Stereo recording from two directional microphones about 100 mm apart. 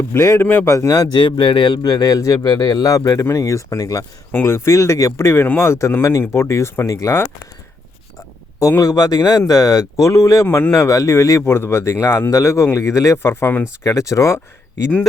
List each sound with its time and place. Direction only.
0.1 s speech: 25° left (ahead or behind)
4.3 s speech: 20° left (ahead or behind)
8.8 s speech: 35° left (ahead or behind); by 13.7 s 20° left (ahead or behind)
13.8 s speech: 30° left (ahead or behind)